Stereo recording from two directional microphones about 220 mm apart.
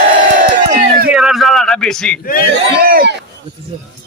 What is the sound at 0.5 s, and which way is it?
Crowd, 35° right (ahead or behind).